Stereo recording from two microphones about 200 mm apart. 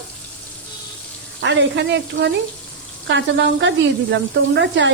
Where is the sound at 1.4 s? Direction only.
65° right (ahead or behind).